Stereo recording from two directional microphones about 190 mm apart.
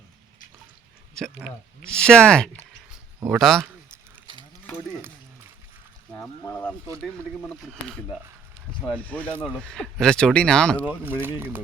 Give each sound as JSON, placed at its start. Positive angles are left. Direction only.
{"t": 1.1, "sound": "speech", "side_deg": 0}
{"t": 6.4, "sound": "speech", "side_deg": 10}
{"t": 11.0, "sound": "speech", "side_deg": -10}